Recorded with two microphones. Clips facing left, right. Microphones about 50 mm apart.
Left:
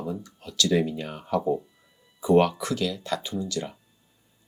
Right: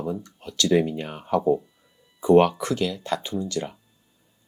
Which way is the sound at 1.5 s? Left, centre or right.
Centre.